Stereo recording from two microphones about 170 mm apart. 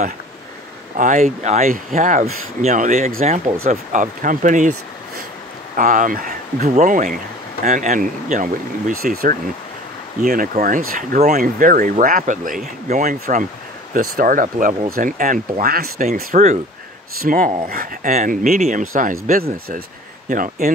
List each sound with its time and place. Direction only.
0.9 s speech: 50° right (ahead or behind)
6.6 s speech: 45° right (ahead or behind)
16.3 s speech: 45° right (ahead or behind)